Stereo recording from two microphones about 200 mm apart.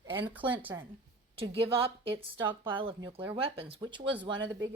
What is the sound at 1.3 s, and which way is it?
Speech, 30° right (ahead or behind).